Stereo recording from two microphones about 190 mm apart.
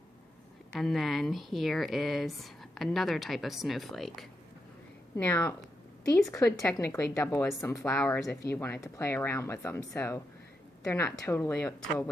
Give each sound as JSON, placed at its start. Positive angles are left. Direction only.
{"t": 0.7, "sound": "speech", "side_deg": 0}